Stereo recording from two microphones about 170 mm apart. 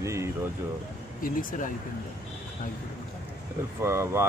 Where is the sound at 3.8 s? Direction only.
15° right (ahead or behind).